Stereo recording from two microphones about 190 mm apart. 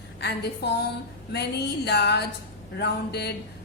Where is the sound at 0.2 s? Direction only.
65° left (ahead or behind).